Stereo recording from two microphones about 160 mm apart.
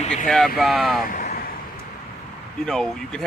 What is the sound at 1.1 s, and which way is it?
Vehicle, 55° left (ahead or behind).